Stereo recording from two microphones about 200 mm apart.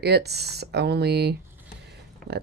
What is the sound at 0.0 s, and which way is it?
Speech, 55° right (ahead or behind).